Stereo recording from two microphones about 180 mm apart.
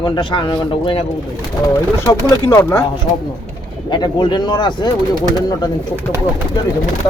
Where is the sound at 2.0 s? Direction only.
15° left (ahead or behind).